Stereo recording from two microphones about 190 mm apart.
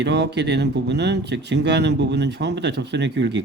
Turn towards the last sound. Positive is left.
turn(degrees=-65)  # may be behind; listen again after turning